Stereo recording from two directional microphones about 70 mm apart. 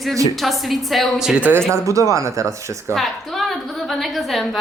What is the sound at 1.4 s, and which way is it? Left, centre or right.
Speech, right.